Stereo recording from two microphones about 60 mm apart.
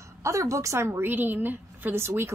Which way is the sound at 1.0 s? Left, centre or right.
Right.